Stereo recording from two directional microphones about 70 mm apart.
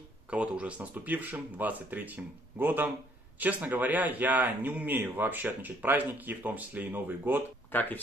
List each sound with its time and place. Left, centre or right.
0.3 s a man's voice: centre
7.7 s speech: left